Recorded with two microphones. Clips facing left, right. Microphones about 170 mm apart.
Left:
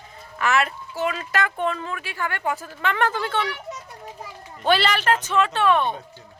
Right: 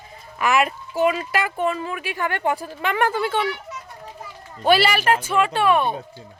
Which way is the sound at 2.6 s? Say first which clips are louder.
Right 2 dB; 15° right (ahead or behind).